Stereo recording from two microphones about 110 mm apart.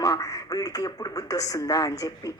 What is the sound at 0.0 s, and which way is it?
A woman's voice, 35° left (ahead or behind).